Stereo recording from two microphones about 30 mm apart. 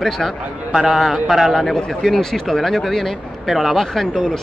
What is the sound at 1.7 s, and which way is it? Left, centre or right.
Speech, centre.